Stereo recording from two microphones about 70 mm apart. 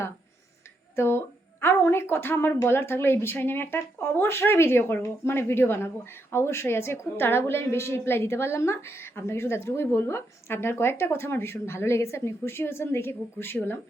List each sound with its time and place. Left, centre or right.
0.9 s a woman's voice: left